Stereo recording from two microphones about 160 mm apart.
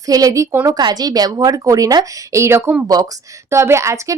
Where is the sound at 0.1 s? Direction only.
20° right (ahead or behind).